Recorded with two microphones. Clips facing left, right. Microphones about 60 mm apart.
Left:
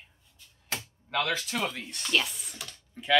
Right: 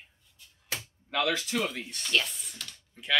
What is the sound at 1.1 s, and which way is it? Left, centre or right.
Speech, centre.